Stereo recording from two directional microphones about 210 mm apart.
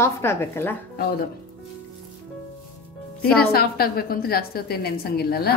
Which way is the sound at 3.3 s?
45° left (ahead or behind).